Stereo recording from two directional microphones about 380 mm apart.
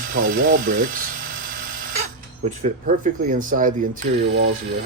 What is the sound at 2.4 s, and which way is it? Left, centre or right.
Speech, centre.